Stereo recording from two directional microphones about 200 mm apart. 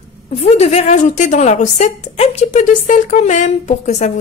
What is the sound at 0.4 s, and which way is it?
A woman's voice, 30° left (ahead or behind).